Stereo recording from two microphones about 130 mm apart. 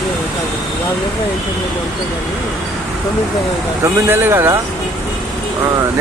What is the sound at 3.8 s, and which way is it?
Speech, 15° right (ahead or behind).